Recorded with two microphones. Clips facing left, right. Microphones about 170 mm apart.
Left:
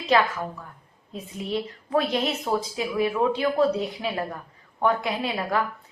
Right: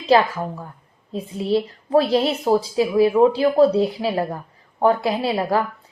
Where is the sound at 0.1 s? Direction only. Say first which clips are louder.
Right 5 dB; 30° right (ahead or behind).